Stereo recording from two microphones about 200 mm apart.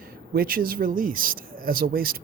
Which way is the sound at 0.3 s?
45° right (ahead or behind).